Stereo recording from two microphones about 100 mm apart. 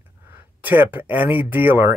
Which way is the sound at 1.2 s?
55° left (ahead or behind).